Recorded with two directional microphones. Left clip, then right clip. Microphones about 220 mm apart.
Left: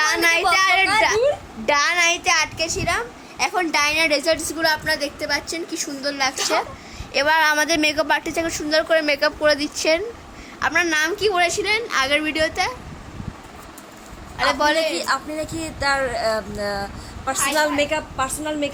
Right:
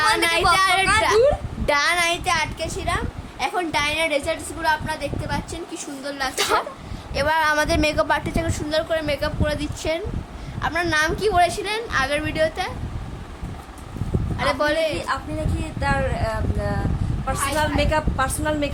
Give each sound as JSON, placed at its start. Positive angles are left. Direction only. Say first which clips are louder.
{"t": 0.0, "sound": "a sound", "louder": "left 1 dB", "side_deg": 10}
{"t": 1.6, "sound": "a child's voice", "louder": "left 2 dB", "side_deg": 10}
{"t": 14.3, "sound": "a woman's voice", "louder": "left 3 dB", "side_deg": 10}
{"t": 17.7, "sound": "a woman's voice", "louder": "even", "side_deg": -5}